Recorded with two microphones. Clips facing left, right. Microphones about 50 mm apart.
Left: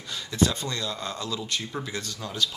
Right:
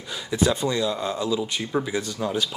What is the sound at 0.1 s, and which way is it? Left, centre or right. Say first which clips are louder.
Speech: right 3 dB; centre.